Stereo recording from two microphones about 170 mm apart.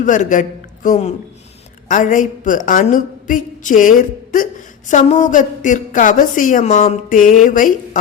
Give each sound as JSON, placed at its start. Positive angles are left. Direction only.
{"t": 0.0, "sound": "a man's voice", "side_deg": 50}